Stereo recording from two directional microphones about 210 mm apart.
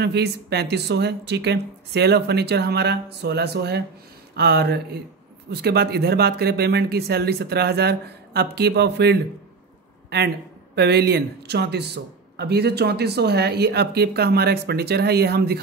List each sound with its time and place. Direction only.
0.0 s speech: 50° right (ahead or behind)